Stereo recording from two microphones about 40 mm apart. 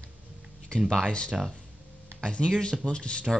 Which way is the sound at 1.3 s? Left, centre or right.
Centre.